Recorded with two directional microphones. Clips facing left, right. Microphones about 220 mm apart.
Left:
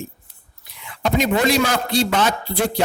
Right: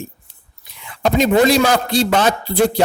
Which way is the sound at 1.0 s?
35° right (ahead or behind).